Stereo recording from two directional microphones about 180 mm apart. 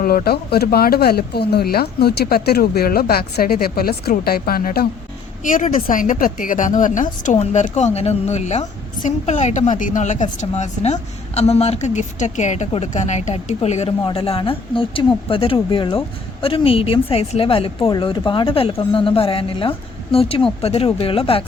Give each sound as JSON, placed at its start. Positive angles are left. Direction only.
{"t": 0.0, "sound": "speech", "side_deg": 55}
{"t": 5.4, "sound": "a woman's voice", "side_deg": 45}